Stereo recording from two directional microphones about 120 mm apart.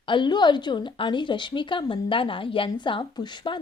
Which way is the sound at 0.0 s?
40° left (ahead or behind).